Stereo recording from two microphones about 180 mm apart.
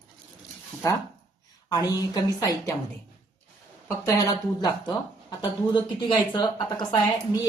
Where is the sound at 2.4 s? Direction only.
20° left (ahead or behind).